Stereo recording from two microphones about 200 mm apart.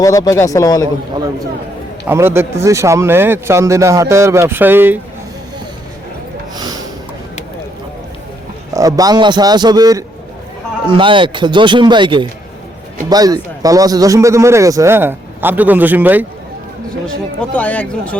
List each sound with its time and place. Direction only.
0.0 s a man's voice: 15° left (ahead or behind)
2.0 s a man's voice: 10° right (ahead or behind)
8.7 s a man's voice: 15° right (ahead or behind)
17.5 s a man's voice: 5° left (ahead or behind)